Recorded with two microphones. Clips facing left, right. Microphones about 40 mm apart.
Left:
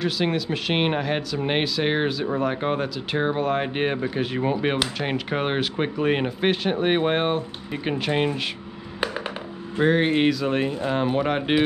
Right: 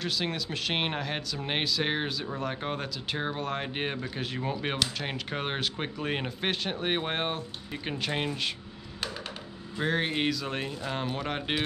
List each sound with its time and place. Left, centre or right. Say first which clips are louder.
0.0 s speech: left 8 dB; centre
9.0 s a sound: left 9 dB; left
9.8 s speech: left 9 dB; centre